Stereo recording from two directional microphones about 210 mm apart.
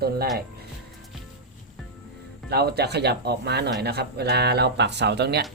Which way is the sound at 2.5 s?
50° right (ahead or behind).